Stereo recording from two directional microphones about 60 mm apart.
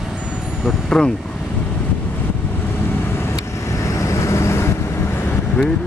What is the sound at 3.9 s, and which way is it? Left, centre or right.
Vehicle, left.